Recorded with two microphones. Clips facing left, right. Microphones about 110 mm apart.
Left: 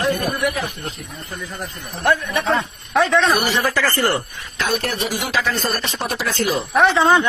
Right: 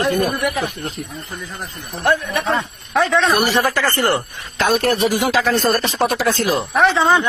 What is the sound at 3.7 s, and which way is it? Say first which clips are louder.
Speech: right 1 dB; 20° right (ahead or behind).